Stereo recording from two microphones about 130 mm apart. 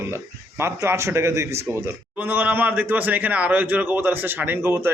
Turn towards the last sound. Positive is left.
turn(degrees=-15)  # may be behind; listen again after turning